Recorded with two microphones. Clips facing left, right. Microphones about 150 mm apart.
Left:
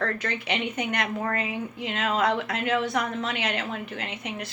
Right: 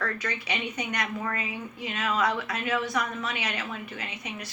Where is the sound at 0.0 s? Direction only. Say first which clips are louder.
Left 3 dB; 55° left (ahead or behind).